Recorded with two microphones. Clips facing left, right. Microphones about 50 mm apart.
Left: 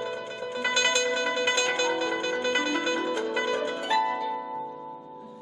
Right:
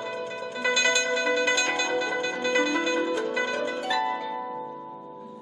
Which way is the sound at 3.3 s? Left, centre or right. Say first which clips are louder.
Even; centre.